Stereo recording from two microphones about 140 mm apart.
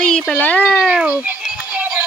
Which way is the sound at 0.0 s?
5° left (ahead or behind).